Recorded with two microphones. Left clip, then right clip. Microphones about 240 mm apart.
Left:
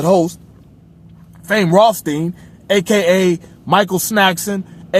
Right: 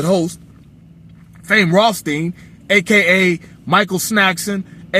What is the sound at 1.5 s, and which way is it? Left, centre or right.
Speech, left.